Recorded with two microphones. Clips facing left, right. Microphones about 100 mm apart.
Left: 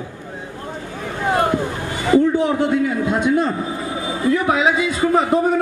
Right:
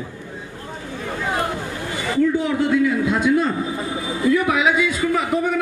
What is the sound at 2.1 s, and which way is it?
A man's voice, 30° left (ahead or behind).